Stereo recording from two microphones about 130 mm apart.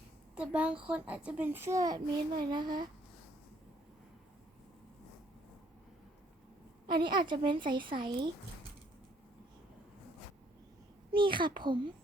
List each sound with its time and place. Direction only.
0.3 s a child's voice: 10° right (ahead or behind); by 2.8 s 35° right (ahead or behind)
6.8 s a woman's voice: 35° right (ahead or behind)
11.1 s a woman's voice: 40° right (ahead or behind)